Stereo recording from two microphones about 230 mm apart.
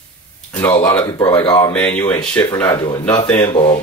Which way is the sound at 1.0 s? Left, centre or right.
Centre.